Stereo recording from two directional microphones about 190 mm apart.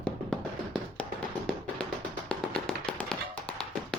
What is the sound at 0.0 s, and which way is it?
Music, 5° left (ahead or behind).